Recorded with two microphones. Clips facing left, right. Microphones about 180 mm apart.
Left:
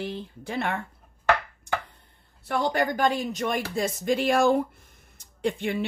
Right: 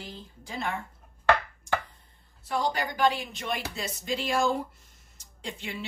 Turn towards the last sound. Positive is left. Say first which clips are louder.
# left 11 dB
turn(degrees=55)  # may be behind; listen again after turning